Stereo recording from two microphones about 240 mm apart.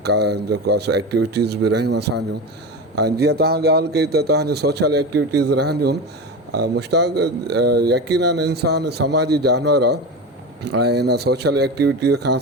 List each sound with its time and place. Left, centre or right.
0.0 s speech: right